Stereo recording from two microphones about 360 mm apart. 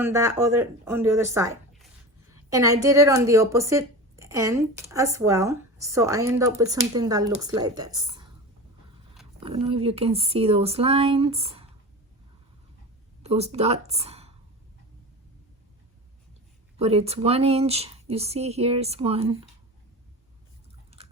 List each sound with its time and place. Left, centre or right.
0.0 s speech: centre
9.4 s speech: centre
13.2 s speech: centre
16.7 s speech: centre